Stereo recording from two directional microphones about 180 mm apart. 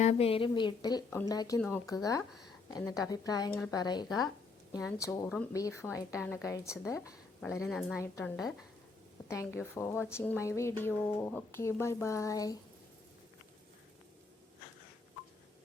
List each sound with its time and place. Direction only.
0.0 s a woman's voice: 35° left (ahead or behind); by 7.1 s 15° left (ahead or behind)
7.6 s a woman's voice: centre (ahead or behind)
7.9 s a woman's voice: 15° left (ahead or behind)